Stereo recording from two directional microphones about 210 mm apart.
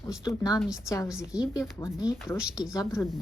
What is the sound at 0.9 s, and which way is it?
Speech, 15° left (ahead or behind).